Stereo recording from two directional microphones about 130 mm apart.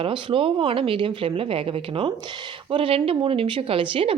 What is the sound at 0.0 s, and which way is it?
Speech, 40° right (ahead or behind).